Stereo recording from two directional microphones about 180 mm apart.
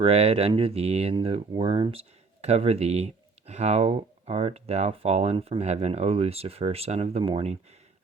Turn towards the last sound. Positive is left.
turn(degrees=-30)  # may be behind; listen again after turning